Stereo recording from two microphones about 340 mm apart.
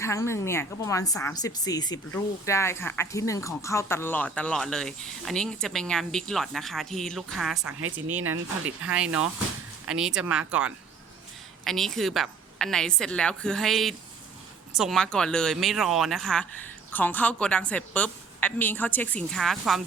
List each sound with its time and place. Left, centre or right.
0.0 s a woman's voice: centre
8.2 s speech: right
8.8 s a woman's voice: centre